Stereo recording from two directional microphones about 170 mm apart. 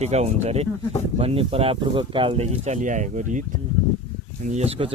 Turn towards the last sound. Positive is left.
turn(degrees=-40)  # may be behind; listen again after turning